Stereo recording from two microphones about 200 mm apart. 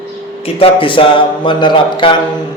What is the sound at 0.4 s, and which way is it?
Speech, 25° left (ahead or behind).